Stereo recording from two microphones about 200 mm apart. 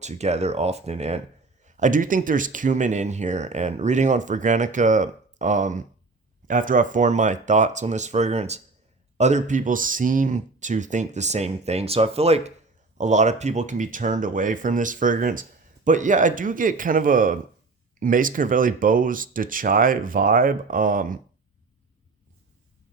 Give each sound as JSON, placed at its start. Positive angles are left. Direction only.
{"t": 0.0, "sound": "speech", "side_deg": -35}